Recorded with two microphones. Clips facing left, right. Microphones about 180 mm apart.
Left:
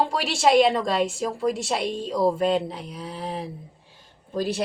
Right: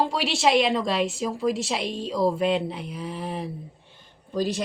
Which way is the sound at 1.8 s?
45° left (ahead or behind).